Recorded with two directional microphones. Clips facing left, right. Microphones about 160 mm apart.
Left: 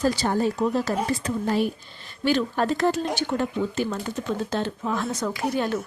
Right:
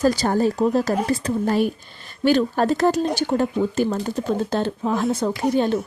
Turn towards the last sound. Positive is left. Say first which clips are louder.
# right 5 dB
turn(degrees=-30)  # may be behind; listen again after turning